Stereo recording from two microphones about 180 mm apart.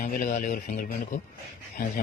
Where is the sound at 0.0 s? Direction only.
45° left (ahead or behind).